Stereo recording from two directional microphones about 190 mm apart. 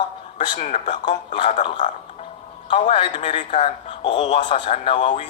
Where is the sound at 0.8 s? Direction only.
25° left (ahead or behind).